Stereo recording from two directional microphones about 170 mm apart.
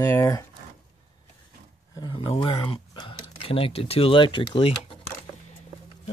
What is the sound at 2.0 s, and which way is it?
Speech, 25° left (ahead or behind).